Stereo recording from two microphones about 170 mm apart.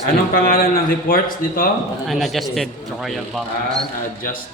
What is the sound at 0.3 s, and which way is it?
A man's voice, 60° left (ahead or behind).